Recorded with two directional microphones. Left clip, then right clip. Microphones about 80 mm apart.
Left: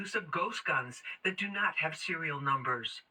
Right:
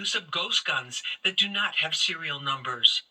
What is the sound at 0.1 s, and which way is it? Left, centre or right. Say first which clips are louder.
Speech: right 6 dB; right.